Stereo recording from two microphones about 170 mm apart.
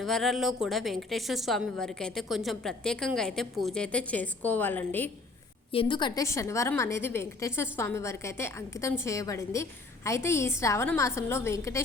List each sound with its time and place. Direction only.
0.0 s a woman's voice: centre (ahead or behind)
5.7 s a woman's voice: 30° left (ahead or behind)